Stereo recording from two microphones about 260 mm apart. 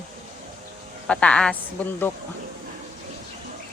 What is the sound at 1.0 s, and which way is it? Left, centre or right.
Speech, centre.